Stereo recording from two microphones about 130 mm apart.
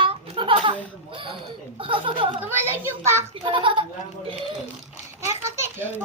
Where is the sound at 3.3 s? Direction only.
45° right (ahead or behind).